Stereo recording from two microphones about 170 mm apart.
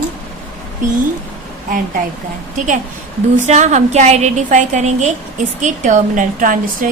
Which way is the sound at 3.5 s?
45° right (ahead or behind).